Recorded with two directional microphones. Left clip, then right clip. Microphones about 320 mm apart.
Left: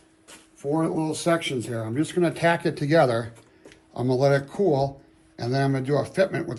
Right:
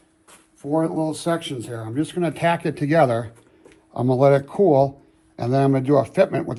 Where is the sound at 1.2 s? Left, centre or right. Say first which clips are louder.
Left 1 dB; centre.